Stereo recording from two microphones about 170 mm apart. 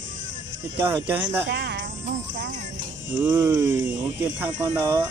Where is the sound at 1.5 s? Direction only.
90° right.